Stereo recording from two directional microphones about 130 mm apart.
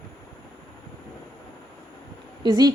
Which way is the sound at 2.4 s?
30° right (ahead or behind).